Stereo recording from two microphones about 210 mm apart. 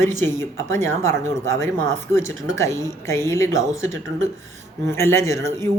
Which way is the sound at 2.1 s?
65° right (ahead or behind).